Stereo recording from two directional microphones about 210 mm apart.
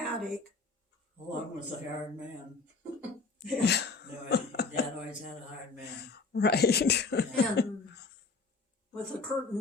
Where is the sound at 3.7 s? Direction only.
50° left (ahead or behind).